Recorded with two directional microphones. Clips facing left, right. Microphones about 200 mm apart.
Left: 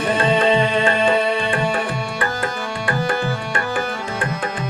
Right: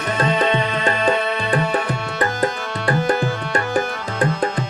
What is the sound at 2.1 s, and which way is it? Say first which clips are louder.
Tabla: right 6 dB; 40° right (ahead or behind).